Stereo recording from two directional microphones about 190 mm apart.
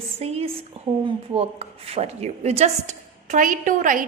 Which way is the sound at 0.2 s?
35° right (ahead or behind).